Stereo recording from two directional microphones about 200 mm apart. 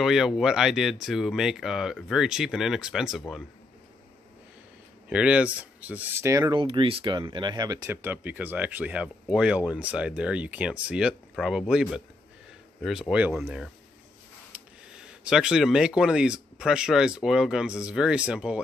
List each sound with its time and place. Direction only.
0.0 s speech: centre (ahead or behind)
5.1 s speech: 5° right (ahead or behind)
14.5 s a sound: 5° right (ahead or behind)
16.0 s speech: 5° right (ahead or behind)